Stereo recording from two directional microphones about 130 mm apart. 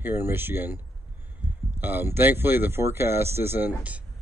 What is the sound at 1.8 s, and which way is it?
Speech, 15° right (ahead or behind).